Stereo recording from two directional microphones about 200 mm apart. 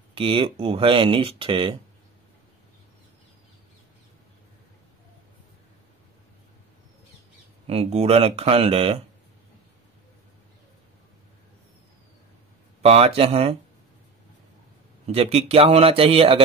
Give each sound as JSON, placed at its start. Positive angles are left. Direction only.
{"t": 0.1, "sound": "speech", "side_deg": -25}
{"t": 7.6, "sound": "speech", "side_deg": -30}
{"t": 12.8, "sound": "speech", "side_deg": -30}
{"t": 15.0, "sound": "speech", "side_deg": -30}